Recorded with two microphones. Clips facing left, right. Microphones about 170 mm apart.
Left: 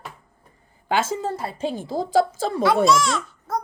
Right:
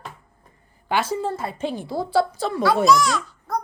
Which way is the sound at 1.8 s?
45° left (ahead or behind).